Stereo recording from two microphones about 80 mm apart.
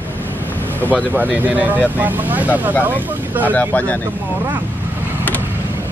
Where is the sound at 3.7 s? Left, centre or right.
Left.